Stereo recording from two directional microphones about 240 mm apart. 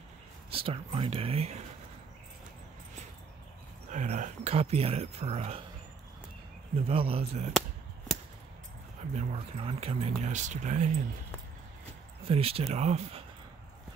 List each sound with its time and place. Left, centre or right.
0.5 s speech: right
3.9 s speech: right
6.9 s speech: right
9.1 s speech: right
12.2 s speech: right